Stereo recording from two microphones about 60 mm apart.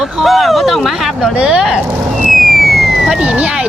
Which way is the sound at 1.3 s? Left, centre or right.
Centre.